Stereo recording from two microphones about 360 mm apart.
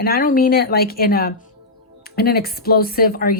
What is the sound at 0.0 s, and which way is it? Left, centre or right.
Speech, left.